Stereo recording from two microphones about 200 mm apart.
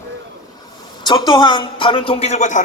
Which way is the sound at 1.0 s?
20° left (ahead or behind).